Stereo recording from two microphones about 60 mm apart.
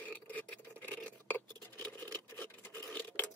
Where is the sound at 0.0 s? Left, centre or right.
Left.